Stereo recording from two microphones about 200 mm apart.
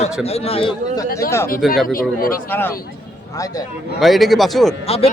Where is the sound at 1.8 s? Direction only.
45° left (ahead or behind).